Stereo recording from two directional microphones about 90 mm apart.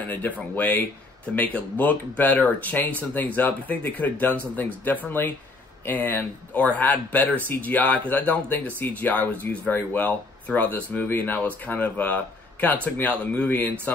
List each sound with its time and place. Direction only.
0.1 s speech: 20° left (ahead or behind)